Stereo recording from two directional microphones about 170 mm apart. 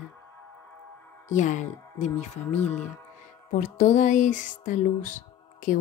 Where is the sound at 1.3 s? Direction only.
45° left (ahead or behind).